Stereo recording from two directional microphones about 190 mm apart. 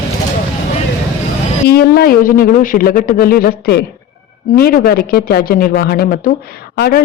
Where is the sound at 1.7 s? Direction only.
55° left (ahead or behind).